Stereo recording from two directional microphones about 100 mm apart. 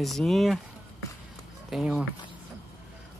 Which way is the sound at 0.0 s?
Centre (ahead or behind).